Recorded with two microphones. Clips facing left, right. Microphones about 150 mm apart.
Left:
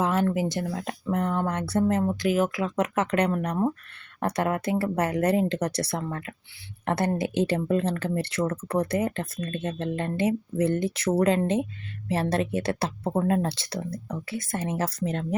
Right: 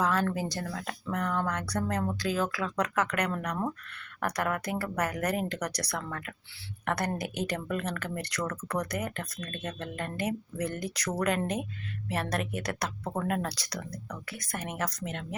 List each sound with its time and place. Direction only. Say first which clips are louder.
0.0 s speech: left 4 dB; 25° left (ahead or behind)